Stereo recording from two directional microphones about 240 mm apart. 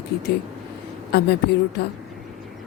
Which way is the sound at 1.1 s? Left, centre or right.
Left.